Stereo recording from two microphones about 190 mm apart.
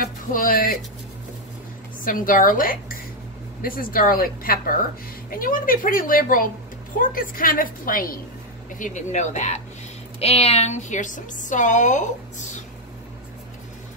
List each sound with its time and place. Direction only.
0.0 s speech: 45° left (ahead or behind)
2.0 s a woman's voice: 45° left (ahead or behind)